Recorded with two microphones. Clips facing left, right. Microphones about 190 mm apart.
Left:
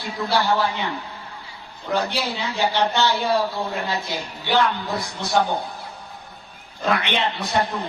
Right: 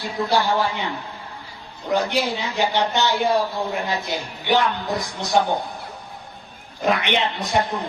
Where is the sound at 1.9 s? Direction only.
20° right (ahead or behind).